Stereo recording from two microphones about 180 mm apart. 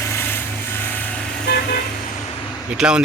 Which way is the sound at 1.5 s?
55° left (ahead or behind).